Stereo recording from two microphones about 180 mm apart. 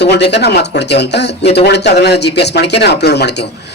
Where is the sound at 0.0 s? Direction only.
70° left (ahead or behind).